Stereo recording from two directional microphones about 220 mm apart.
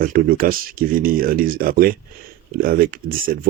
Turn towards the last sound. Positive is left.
turn(degrees=-40)  # may be behind; listen again after turning